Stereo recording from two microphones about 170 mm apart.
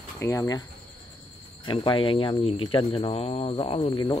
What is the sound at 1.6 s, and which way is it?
Speech, 30° left (ahead or behind).